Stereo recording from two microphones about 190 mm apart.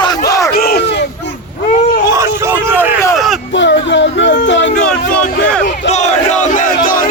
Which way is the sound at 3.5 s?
70° left (ahead or behind).